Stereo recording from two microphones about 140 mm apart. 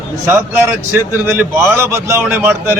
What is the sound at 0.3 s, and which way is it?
A man's voice, 15° right (ahead or behind).